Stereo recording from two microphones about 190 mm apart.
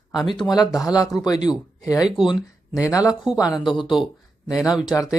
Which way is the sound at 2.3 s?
15° left (ahead or behind).